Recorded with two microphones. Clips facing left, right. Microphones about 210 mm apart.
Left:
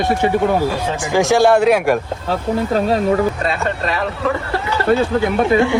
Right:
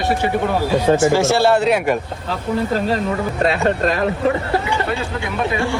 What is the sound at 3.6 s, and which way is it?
Speech, 45° right (ahead or behind).